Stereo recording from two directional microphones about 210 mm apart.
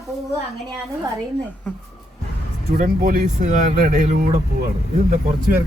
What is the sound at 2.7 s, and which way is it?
Speech, 40° right (ahead or behind).